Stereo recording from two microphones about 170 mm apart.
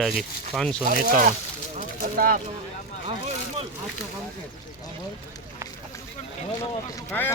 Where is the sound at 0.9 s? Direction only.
60° right (ahead or behind).